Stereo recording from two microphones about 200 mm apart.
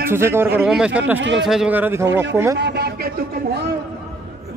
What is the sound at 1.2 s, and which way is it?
Speech, 65° right (ahead or behind).